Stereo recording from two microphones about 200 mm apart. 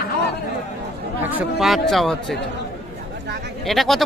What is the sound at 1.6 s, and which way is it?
Speech, centre (ahead or behind).